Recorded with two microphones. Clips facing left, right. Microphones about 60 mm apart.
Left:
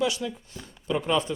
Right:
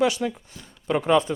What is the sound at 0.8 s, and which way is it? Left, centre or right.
Speech, right.